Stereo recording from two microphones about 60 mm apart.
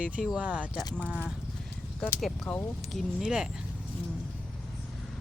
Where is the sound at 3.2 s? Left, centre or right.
Centre.